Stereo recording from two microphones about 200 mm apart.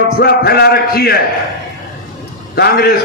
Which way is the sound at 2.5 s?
50° left (ahead or behind).